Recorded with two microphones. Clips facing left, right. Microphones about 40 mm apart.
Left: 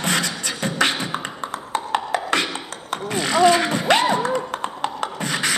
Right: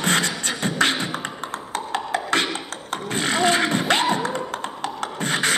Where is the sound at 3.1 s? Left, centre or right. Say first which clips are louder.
Left 4 dB; right.